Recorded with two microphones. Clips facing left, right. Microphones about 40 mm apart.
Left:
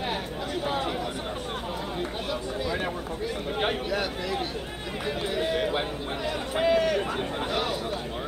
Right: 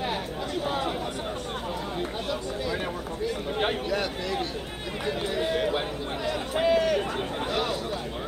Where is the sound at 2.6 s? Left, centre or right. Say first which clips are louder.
Left 1 dB; centre.